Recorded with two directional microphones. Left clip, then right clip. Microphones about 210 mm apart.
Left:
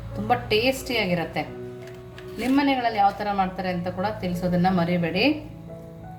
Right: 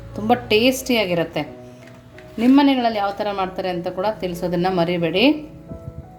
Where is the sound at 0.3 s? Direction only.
40° right (ahead or behind).